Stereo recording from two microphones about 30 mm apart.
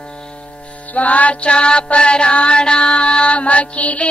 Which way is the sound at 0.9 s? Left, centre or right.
Left.